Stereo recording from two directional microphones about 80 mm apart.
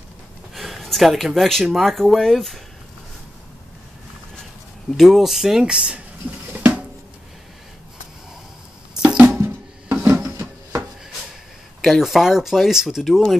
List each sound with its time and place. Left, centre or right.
0.6 s speech: centre
4.9 s speech: centre
9.0 s music: centre
9.4 s wood: right
11.8 s speech: centre